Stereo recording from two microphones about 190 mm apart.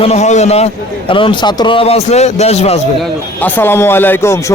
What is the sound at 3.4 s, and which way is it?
Speech, 10° left (ahead or behind).